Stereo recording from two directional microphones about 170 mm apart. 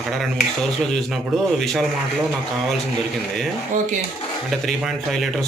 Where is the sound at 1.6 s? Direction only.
Centre (ahead or behind).